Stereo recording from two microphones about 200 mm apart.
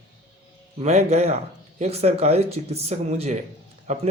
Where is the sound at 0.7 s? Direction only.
35° right (ahead or behind).